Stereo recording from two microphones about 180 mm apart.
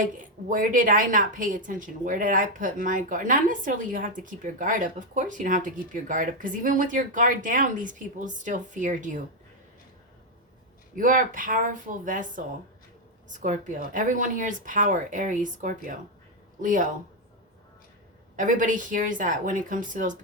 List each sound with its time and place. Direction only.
0.0 s a woman's voice: 45° right (ahead or behind)
10.9 s a woman's voice: 50° right (ahead or behind)
13.3 s a woman's voice: 45° right (ahead or behind)
18.3 s a woman's voice: 45° right (ahead or behind)